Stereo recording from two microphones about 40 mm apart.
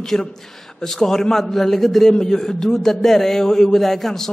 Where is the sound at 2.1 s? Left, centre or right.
Centre.